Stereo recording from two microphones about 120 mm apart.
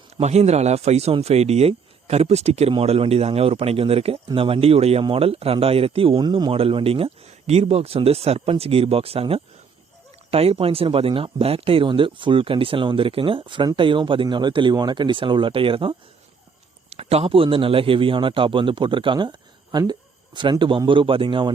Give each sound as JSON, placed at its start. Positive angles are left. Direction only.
{"t": 0.2, "sound": "speech", "side_deg": -65}
{"t": 6.2, "sound": "speech", "side_deg": -35}
{"t": 6.5, "sound": "speech", "side_deg": -50}
{"t": 16.9, "sound": "speech", "side_deg": -60}